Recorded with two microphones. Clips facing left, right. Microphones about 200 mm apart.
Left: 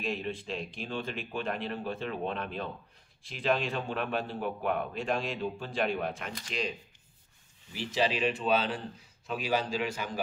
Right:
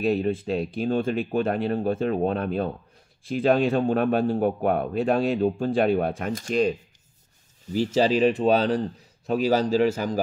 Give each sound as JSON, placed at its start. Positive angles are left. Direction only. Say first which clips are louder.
{"t": 0.0, "sound": "a man's voice", "louder": "right 11 dB", "side_deg": -40}
{"t": 7.7, "sound": "speech", "louder": "right 9 dB", "side_deg": -40}